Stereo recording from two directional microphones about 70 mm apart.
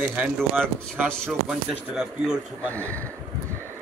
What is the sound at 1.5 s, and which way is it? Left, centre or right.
Speech, centre.